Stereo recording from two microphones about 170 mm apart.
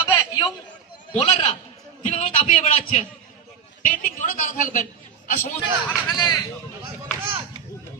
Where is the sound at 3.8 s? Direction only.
50° left (ahead or behind).